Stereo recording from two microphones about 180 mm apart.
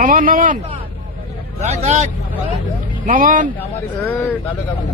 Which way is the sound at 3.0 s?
50° right (ahead or behind).